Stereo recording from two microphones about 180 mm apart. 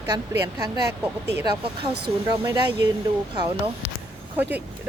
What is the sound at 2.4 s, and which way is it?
Speech, 15° right (ahead or behind).